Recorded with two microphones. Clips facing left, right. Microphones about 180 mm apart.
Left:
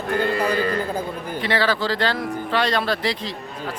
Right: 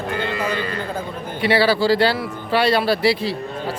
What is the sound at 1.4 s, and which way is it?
A man's voice, 10° right (ahead or behind).